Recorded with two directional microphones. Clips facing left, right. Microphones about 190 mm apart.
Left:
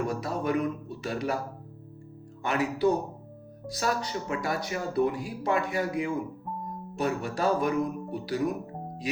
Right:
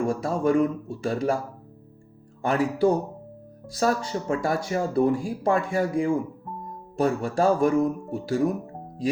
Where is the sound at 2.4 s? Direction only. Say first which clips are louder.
Right 4 dB; 30° right (ahead or behind).